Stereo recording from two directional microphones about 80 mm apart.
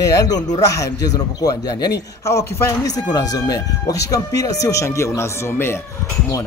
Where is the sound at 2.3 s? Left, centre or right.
Left.